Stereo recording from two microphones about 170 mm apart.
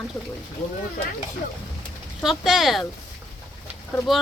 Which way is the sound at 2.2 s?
Centre (ahead or behind).